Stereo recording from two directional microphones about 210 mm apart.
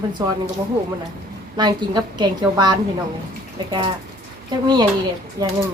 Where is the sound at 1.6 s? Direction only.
20° right (ahead or behind).